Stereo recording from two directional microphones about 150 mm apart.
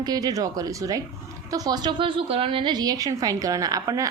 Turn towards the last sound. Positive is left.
turn(degrees=-20)  # may be behind; listen again after turning